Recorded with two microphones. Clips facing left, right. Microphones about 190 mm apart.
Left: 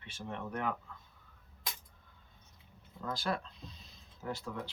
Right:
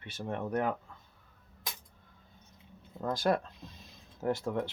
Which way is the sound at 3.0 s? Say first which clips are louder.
Right 7 dB; 45° right (ahead or behind).